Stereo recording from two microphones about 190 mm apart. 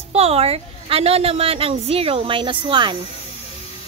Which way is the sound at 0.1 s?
30° right (ahead or behind).